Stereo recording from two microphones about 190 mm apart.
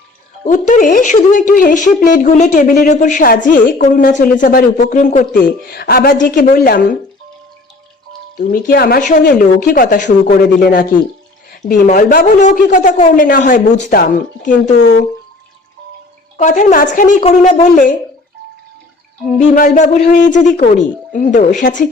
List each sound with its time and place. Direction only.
0.4 s speech: 45° left (ahead or behind)
8.4 s speech: 50° left (ahead or behind)
16.4 s speech: 40° left (ahead or behind)
19.4 s speech: 40° left (ahead or behind)